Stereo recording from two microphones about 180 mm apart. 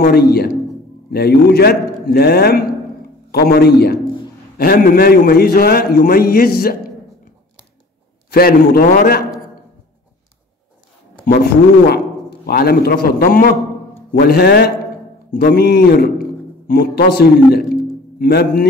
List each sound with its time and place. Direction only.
0.0 s a man's voice: 60° left (ahead or behind)
8.3 s a man's voice: 55° left (ahead or behind)
11.9 s a man's voice: 60° left (ahead or behind)